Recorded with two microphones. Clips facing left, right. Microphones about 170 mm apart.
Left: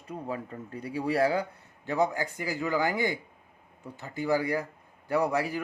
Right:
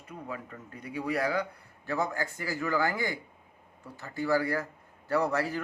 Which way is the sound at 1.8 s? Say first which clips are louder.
Left 4 dB; 15° left (ahead or behind).